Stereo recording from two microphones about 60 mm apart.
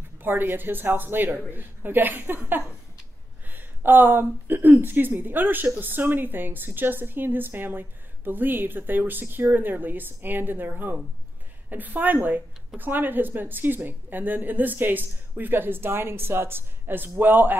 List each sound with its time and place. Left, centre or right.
0.2 s a woman's voice: right
11.7 s a woman's voice: right